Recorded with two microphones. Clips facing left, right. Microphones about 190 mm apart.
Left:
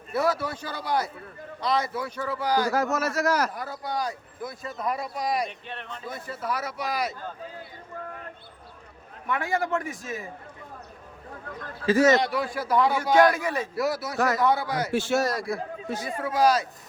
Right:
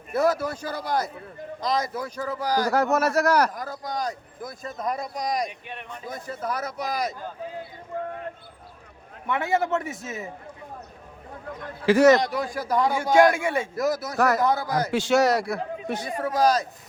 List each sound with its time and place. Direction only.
0.1 s speech: 45° right (ahead or behind)
2.7 s speech: 65° right (ahead or behind)
3.5 s speech: 40° right (ahead or behind)
5.5 s speech: 15° right (ahead or behind)
6.1 s speech: 45° right (ahead or behind)
9.2 s a man's voice: 25° right (ahead or behind)
11.9 s a man's voice: 70° right (ahead or behind)
12.1 s speech: 45° right (ahead or behind)
13.3 s a man's voice: 25° right (ahead or behind)
13.7 s speech: 45° right (ahead or behind)
14.9 s a man's voice: 90° right; by 16.0 s 70° right (ahead or behind)
16.1 s speech: 40° right (ahead or behind)